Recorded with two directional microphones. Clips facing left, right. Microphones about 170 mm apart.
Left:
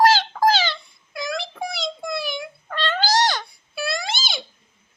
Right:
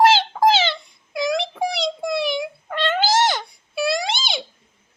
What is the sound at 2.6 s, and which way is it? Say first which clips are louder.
Cat: right 2 dB; 15° right (ahead or behind).